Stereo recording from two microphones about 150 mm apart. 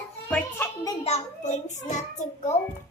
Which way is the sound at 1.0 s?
50° left (ahead or behind).